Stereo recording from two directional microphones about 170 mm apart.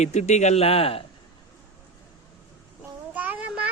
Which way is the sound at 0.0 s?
40° left (ahead or behind).